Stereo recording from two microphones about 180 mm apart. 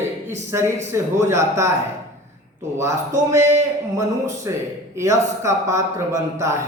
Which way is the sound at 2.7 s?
15° right (ahead or behind).